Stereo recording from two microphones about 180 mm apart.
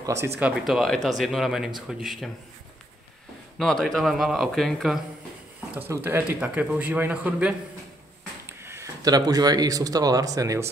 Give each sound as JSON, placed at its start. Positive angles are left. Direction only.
{"t": 0.0, "sound": "speech", "side_deg": -15}
{"t": 0.4, "sound": "speech", "side_deg": -5}
{"t": 3.5, "sound": "speech", "side_deg": 0}
{"t": 5.8, "sound": "a man's voice", "side_deg": -10}